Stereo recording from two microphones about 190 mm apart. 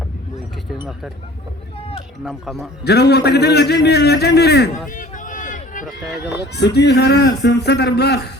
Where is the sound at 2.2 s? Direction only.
Centre (ahead or behind).